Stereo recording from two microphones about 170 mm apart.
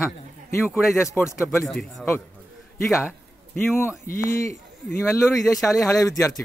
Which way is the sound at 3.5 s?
15° left (ahead or behind).